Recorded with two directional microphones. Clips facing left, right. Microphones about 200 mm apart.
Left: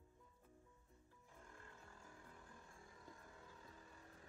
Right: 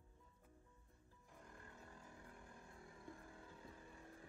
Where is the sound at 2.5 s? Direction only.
25° right (ahead or behind).